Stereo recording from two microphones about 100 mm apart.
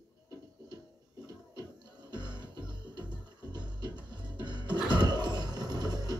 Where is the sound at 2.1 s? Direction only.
45° right (ahead or behind).